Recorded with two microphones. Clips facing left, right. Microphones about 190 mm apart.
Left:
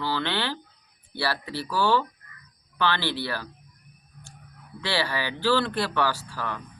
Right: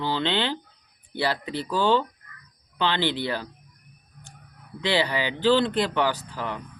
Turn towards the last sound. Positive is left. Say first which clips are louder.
# right 2 dB
turn(degrees=-20)  # may be behind; listen again after turning